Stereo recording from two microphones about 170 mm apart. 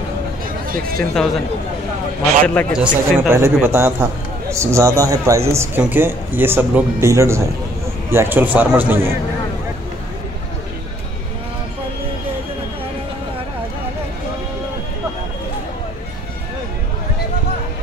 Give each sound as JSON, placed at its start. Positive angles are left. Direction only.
{"t": 1.1, "sound": "speech", "side_deg": 0}
{"t": 2.4, "sound": "a man's voice", "side_deg": 10}
{"t": 2.8, "sound": "speech", "side_deg": -15}